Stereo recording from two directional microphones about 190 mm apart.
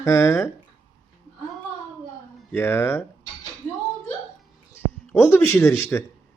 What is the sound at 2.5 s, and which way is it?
Speech, 10° left (ahead or behind).